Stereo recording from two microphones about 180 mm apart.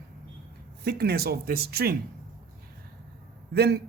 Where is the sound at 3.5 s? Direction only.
65° right (ahead or behind).